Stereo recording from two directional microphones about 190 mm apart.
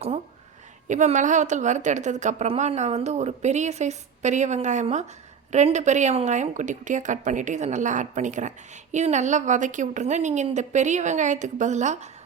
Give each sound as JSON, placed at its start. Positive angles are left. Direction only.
{"t": 0.9, "sound": "a woman's voice", "side_deg": -40}